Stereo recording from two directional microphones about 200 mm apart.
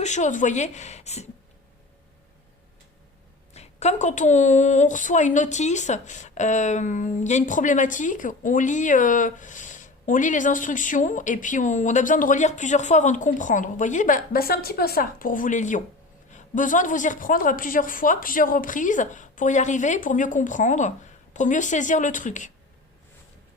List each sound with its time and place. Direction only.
0.0 s speech: 35° left (ahead or behind)
3.5 s speech: 35° left (ahead or behind)